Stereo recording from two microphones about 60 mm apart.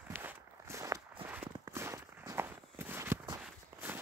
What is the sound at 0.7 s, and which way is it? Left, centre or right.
Walk, right.